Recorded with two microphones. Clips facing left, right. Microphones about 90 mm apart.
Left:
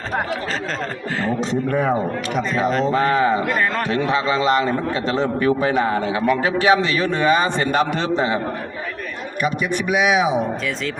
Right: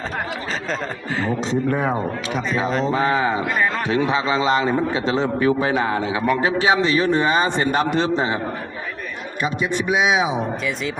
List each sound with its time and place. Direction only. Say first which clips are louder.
1.1 s a man's voice: even; 5° right (ahead or behind)
1.4 s a man's voice: left 1 dB; 20° right (ahead or behind)
1.9 s a man's voice: left 2 dB; centre (ahead or behind)
2.8 s speech: left 2 dB; 15° right (ahead or behind)
3.4 s a man's voice: left 1 dB; 5° right (ahead or behind)
4.1 s a man's voice: left 3 dB; 20° right (ahead or behind)
9.4 s a man's voice: left 1 dB; 20° right (ahead or behind)